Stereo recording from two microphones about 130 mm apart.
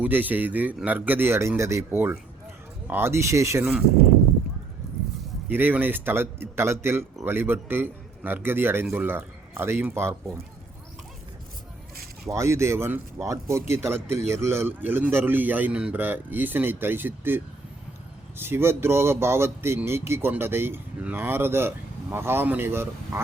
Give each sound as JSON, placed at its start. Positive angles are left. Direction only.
{"t": 0.0, "sound": "a man's voice", "side_deg": -15}
{"t": 5.5, "sound": "a man's voice", "side_deg": -15}
{"t": 12.3, "sound": "a man's voice", "side_deg": -20}